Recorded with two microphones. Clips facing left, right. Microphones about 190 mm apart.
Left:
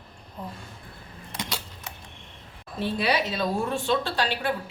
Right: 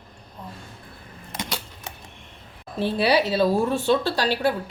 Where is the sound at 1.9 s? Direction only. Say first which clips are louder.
Right 3 dB; 25° right (ahead or behind).